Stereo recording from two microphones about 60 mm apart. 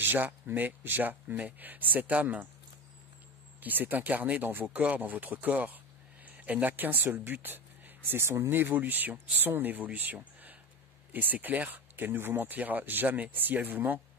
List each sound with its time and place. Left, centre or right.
0.0 s speech: right
3.6 s speech: right